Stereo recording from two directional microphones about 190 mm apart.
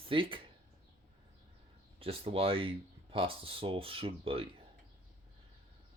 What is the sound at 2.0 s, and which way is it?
Speech, 30° right (ahead or behind).